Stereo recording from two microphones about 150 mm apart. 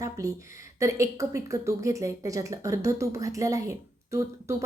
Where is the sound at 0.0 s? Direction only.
25° right (ahead or behind).